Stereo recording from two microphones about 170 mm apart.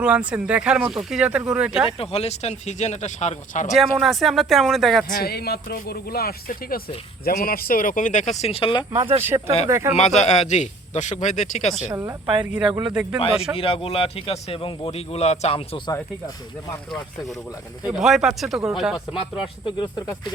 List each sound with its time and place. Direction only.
0.0 s speech: 5° right (ahead or behind)
1.9 s a man's voice: 35° left (ahead or behind)
3.9 s speech: centre (ahead or behind)
5.1 s speech: 65° left (ahead or behind); by 8.9 s 30° left (ahead or behind)
8.9 s speech: 35° right (ahead or behind)
9.6 s speech: 15° right (ahead or behind)
9.9 s speech: 40° left (ahead or behind)
11.9 s speech: 15° right (ahead or behind)
12.5 s speech: 5° right (ahead or behind)
13.1 s a man's voice: 35° left (ahead or behind)
16.9 s speech: centre (ahead or behind)
19.6 s speech: 25° left (ahead or behind)